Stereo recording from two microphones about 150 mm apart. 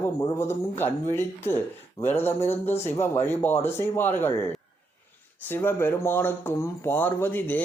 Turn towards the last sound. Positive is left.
turn(degrees=15)  # may be behind; listen again after turning